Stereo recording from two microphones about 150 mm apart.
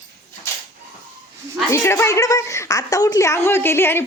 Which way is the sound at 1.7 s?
20° left (ahead or behind).